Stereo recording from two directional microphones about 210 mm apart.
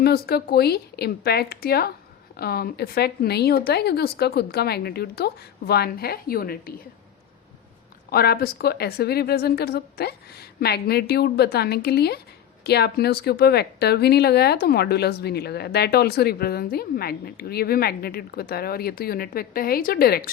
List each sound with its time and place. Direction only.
0.0 s a woman's voice: 50° left (ahead or behind)
8.1 s a woman's voice: 45° left (ahead or behind)